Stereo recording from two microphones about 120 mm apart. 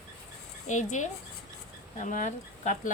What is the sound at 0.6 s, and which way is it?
Speech, 85° left.